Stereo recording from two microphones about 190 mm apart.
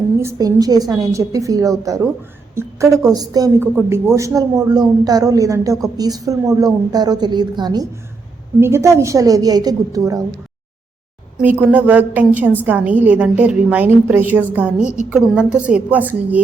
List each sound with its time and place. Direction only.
0.2 s a woman's voice: 15° right (ahead or behind)
11.3 s a woman's voice: 10° right (ahead or behind)